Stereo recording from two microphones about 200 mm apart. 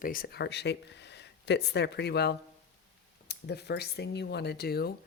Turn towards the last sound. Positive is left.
turn(degrees=50)  # may be behind; listen again after turning